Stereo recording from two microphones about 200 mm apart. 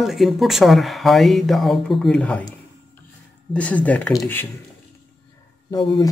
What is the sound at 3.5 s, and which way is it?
Speech, 5° left (ahead or behind).